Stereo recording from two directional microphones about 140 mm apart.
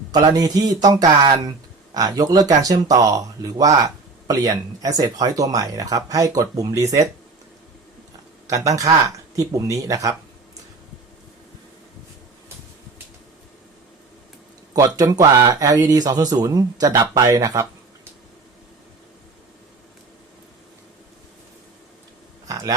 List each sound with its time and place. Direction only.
0.1 s speech: 30° right (ahead or behind)
8.4 s speech: 25° right (ahead or behind)
14.8 s speech: 25° right (ahead or behind)
22.4 s a man's voice: 25° right (ahead or behind)